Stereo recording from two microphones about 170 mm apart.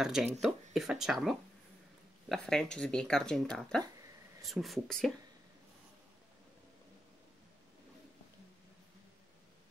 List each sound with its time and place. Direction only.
0.0 s speech: 5° right (ahead or behind)